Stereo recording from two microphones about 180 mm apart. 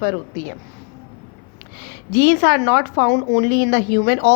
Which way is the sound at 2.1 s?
65° left (ahead or behind).